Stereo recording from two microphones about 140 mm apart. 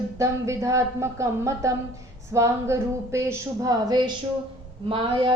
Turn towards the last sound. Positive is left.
turn(degrees=-35)  # may be behind; listen again after turning